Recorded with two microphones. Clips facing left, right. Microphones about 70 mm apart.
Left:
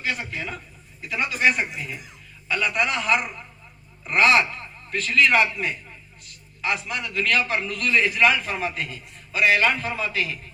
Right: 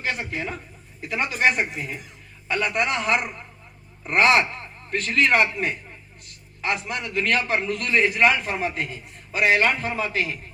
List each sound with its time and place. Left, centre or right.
0.3 s a man's voice: right